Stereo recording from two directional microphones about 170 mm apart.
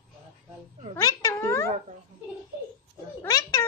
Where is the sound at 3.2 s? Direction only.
20° left (ahead or behind).